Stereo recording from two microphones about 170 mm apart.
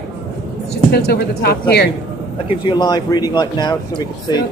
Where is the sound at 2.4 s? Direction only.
30° left (ahead or behind).